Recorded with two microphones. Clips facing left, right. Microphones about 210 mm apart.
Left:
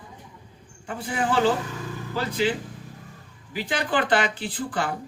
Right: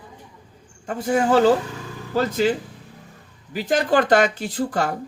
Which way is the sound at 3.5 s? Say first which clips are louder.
Right 6 dB; 45° right (ahead or behind).